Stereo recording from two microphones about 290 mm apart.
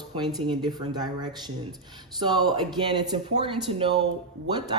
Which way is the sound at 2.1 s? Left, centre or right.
Centre.